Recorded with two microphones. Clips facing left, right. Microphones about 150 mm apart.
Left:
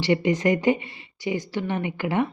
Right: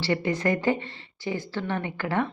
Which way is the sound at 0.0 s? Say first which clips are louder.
Left 4 dB; 20° left (ahead or behind).